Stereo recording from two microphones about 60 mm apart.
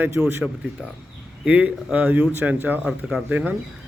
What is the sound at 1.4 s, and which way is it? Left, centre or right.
A man's voice, right.